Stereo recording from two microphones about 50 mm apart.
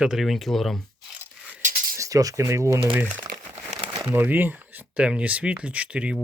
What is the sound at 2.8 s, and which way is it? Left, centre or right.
Speech, right.